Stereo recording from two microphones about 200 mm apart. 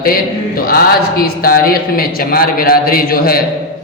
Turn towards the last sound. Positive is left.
turn(degrees=50)  # may be behind; listen again after turning